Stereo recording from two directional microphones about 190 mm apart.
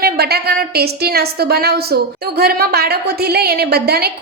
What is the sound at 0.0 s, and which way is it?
A woman's voice, 55° right (ahead or behind).